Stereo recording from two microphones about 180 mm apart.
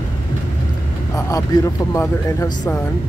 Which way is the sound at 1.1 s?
20° left (ahead or behind).